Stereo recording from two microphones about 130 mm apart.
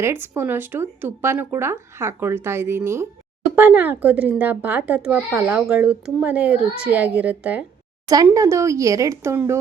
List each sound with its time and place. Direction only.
0.0 s speech: 20° right (ahead or behind)
8.0 s speech: 25° right (ahead or behind)